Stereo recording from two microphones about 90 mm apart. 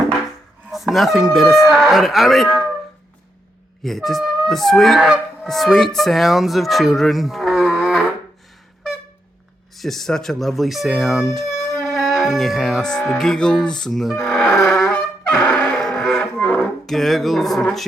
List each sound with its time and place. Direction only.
0.7 s speech: centre (ahead or behind)
3.8 s speech: 5° left (ahead or behind)
9.7 s speech: centre (ahead or behind)
14.7 s wind instrument: 5° left (ahead or behind)
15.7 s music: 5° left (ahead or behind)